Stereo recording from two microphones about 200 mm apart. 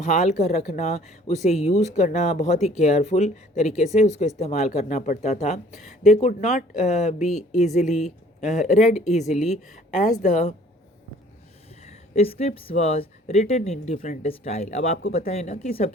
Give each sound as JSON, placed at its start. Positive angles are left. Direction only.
{"t": 0.0, "sound": "speech", "side_deg": 35}
{"t": 12.1, "sound": "speech", "side_deg": 30}